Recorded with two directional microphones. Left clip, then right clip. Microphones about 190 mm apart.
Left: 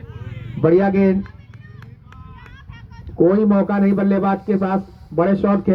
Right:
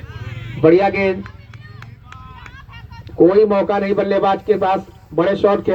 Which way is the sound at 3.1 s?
45° right (ahead or behind).